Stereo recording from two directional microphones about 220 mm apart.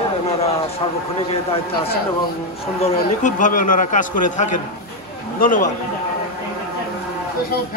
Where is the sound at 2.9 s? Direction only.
35° left (ahead or behind).